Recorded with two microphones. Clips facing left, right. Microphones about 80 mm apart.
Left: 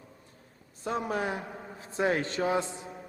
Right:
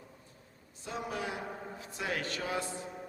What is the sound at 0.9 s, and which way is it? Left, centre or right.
A man's voice, left.